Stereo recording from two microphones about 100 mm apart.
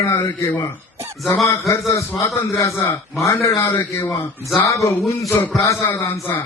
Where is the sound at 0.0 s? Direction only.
30° left (ahead or behind).